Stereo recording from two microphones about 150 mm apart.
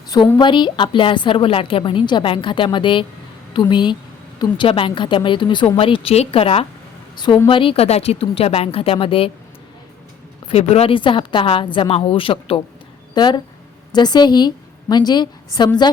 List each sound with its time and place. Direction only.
0.3 s a woman's voice: 30° left (ahead or behind)
10.5 s a woman's voice: 45° left (ahead or behind); by 15.9 s 30° left (ahead or behind)